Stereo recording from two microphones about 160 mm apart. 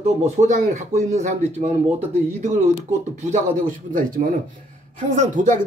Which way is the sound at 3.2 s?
50° right (ahead or behind).